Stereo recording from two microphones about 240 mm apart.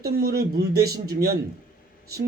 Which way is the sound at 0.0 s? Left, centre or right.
Right.